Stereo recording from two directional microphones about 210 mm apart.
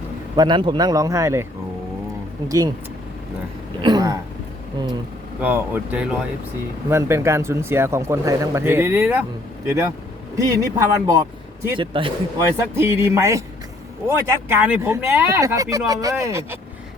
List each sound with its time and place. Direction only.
0.3 s speech: 20° right (ahead or behind)
2.5 s speech: 15° right (ahead or behind)
3.8 s speech: 20° right (ahead or behind)
5.4 s speech: 10° right (ahead or behind); by 12.5 s 25° right (ahead or behind)
12.5 s speech: 10° right (ahead or behind)